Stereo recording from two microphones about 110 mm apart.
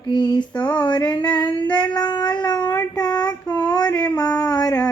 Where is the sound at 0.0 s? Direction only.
45° left (ahead or behind).